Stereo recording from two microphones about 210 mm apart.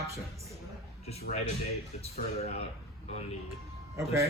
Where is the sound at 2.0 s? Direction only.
30° left (ahead or behind).